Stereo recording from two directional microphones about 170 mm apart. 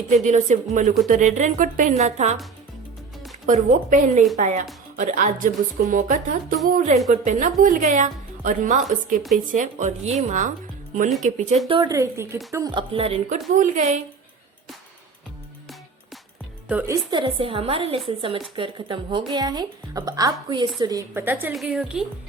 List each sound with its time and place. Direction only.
0.1 s speech: 45° right (ahead or behind)
3.4 s speech: 50° right (ahead or behind)
11.7 s a woman's voice: 20° right (ahead or behind)
13.6 s speech: 45° right (ahead or behind)
16.6 s a woman's voice: 10° right (ahead or behind)
17.1 s a woman's voice: 30° right (ahead or behind)
21.1 s a woman's voice: 10° right (ahead or behind)
21.5 s a woman's voice: centre (ahead or behind)